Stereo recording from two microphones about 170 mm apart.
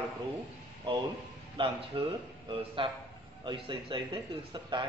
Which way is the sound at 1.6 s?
30° right (ahead or behind).